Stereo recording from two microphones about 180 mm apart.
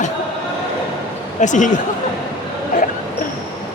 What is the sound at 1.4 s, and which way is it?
Speech, 45° left (ahead or behind).